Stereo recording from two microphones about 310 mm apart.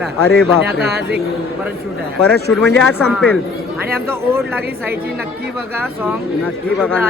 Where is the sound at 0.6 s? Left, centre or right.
Right.